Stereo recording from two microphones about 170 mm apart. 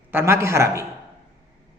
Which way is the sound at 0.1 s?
15° right (ahead or behind).